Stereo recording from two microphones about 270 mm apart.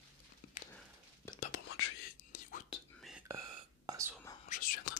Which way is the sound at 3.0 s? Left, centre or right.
Centre.